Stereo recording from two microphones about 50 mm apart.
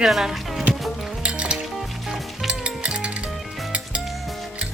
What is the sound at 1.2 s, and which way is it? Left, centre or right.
Music, right.